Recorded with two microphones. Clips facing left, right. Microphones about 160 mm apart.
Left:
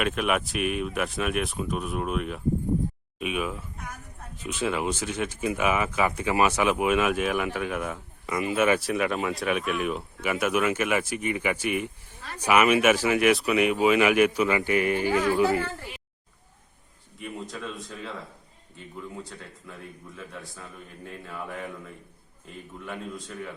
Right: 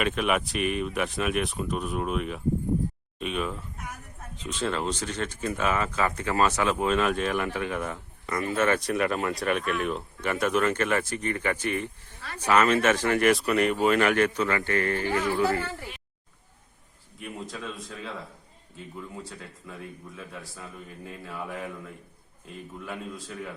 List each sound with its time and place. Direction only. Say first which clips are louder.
0.0 s a man's voice: even; centre (ahead or behind); by 15.6 s 15° left (ahead or behind)
17.2 s a man's voice: left 1 dB; centre (ahead or behind)